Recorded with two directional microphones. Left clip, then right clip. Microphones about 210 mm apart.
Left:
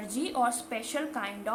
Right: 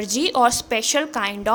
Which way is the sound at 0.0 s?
45° right (ahead or behind).